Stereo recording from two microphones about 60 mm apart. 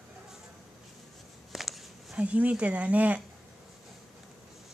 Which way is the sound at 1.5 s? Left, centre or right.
Centre.